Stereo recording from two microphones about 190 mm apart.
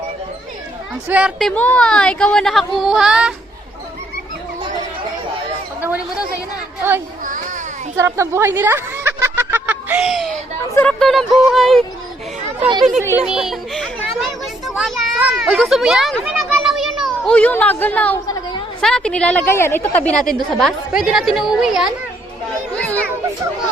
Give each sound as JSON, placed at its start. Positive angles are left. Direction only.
{"t": 1.0, "sound": "speech", "side_deg": -5}
{"t": 6.8, "sound": "a child's voice", "side_deg": -10}
{"t": 7.9, "sound": "a sound", "side_deg": -15}
{"t": 10.8, "sound": "speech", "side_deg": 5}
{"t": 13.0, "sound": "a child's voice", "side_deg": -10}
{"t": 22.7, "sound": "children playing", "side_deg": 5}